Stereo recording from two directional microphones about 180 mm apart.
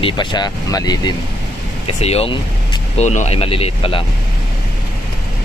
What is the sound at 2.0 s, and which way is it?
Speech, 35° left (ahead or behind).